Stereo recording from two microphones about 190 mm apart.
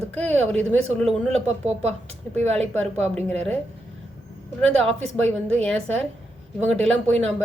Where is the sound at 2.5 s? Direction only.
5° left (ahead or behind).